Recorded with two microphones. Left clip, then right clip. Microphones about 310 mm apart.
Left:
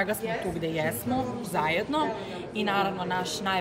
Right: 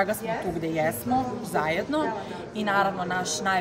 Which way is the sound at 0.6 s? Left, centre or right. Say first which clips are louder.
Right 3 dB; centre.